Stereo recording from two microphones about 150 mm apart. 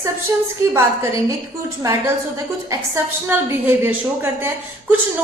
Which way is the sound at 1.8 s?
20° right (ahead or behind).